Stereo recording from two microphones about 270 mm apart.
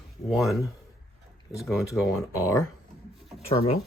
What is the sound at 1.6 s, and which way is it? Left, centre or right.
Speech, centre.